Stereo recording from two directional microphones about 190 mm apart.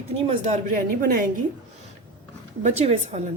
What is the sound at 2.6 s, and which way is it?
Speech, 35° right (ahead or behind).